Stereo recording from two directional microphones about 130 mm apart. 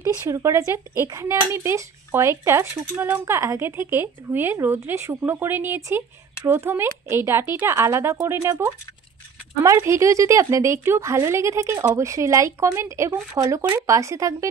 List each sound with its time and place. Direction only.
0.3 s speech: 20° right (ahead or behind)